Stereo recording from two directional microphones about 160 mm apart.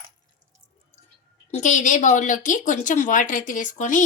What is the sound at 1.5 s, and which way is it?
Speech, 50° left (ahead or behind).